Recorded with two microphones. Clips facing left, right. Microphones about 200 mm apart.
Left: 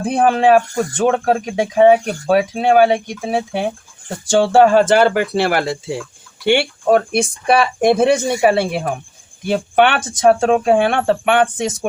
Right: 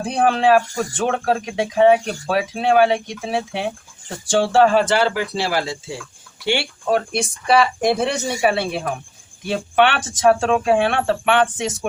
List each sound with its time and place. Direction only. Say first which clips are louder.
0.0 s speech: left 3 dB; 45° left (ahead or behind)